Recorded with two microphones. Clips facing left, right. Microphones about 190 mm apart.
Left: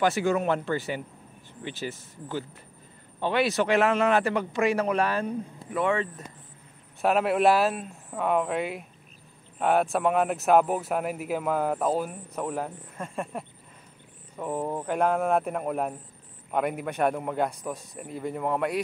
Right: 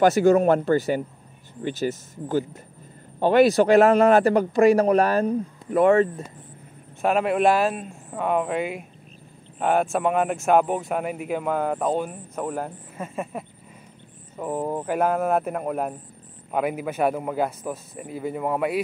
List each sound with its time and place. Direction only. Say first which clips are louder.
0.0 s speech: right 8 dB; 40° right (ahead or behind)
7.0 s speech: right 2 dB; centre (ahead or behind)